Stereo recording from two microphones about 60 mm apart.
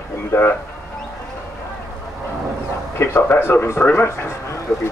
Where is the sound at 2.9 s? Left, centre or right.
Left.